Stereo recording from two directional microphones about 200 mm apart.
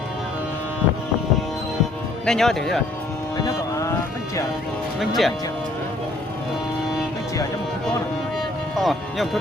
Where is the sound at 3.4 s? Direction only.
15° left (ahead or behind).